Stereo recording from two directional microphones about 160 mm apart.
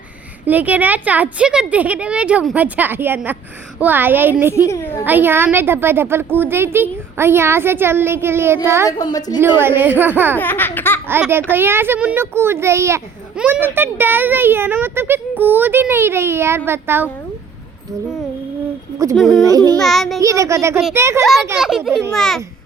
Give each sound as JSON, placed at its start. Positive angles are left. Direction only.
{"t": 0.4, "sound": "a child's voice", "side_deg": -10}
{"t": 4.5, "sound": "a woman's voice", "side_deg": 20}
{"t": 5.0, "sound": "a child's voice", "side_deg": -10}
{"t": 8.9, "sound": "a woman's voice", "side_deg": 25}
{"t": 9.6, "sound": "a child's voice", "side_deg": -15}
{"t": 10.3, "sound": "laughter", "side_deg": 10}
{"t": 11.1, "sound": "a child's voice", "side_deg": -15}
{"t": 19.1, "sound": "a child's voice", "side_deg": 0}
{"t": 19.5, "sound": "a child's voice", "side_deg": -25}
{"t": 19.8, "sound": "a child's voice", "side_deg": 0}
{"t": 20.1, "sound": "a child's voice", "side_deg": -20}
{"t": 21.6, "sound": "a child's voice", "side_deg": 0}